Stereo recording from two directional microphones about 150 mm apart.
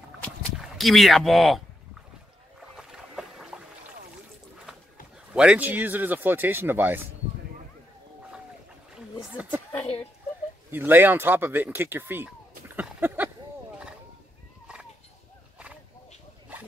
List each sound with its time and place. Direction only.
0.6 s speech: centre (ahead or behind)
2.7 s boat: 5° right (ahead or behind)
5.3 s speech: 5° right (ahead or behind)
8.9 s a sound: 10° right (ahead or behind)
10.7 s speech: 15° right (ahead or behind)